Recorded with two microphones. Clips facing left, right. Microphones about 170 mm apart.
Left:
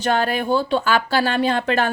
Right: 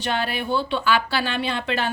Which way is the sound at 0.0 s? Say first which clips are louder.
Left 5 dB; 45° left (ahead or behind).